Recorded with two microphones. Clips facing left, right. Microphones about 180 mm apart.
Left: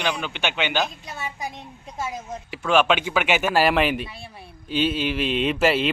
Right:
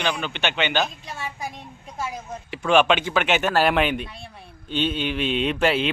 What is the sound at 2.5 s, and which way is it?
A man's voice, centre (ahead or behind).